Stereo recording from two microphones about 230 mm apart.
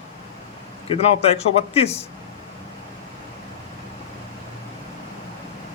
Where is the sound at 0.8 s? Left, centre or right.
Left.